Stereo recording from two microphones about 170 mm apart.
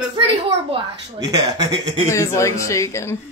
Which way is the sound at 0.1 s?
30° right (ahead or behind).